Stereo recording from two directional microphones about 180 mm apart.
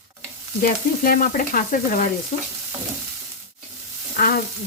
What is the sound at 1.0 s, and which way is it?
Frying, 50° left (ahead or behind).